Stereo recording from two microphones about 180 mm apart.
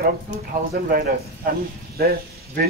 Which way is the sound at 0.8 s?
55° right (ahead or behind).